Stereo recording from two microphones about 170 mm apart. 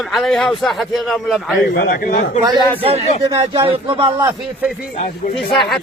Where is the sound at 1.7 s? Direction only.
65° left (ahead or behind).